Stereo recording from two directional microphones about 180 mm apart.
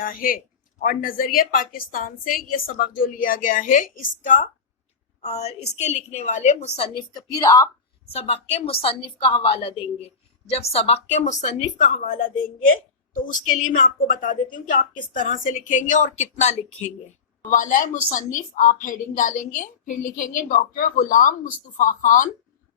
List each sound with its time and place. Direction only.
0.0 s speech: 50° left (ahead or behind)
5.2 s a woman's voice: 35° left (ahead or behind); by 7.7 s 20° left (ahead or behind)
8.4 s a woman's voice: 35° left (ahead or behind)
17.6 s speech: 45° left (ahead or behind)